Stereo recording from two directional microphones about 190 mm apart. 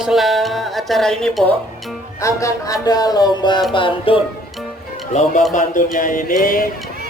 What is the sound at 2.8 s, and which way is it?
Music, 20° left (ahead or behind).